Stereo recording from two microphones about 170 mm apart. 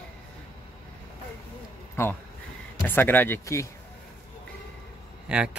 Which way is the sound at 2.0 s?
15° left (ahead or behind).